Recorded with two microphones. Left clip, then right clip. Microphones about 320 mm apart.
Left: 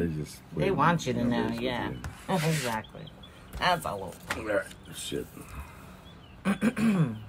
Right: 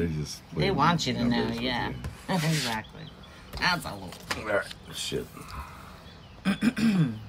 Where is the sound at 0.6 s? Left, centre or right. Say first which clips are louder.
Right 1 dB; centre.